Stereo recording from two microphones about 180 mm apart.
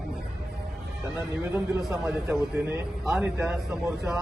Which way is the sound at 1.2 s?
5° right (ahead or behind).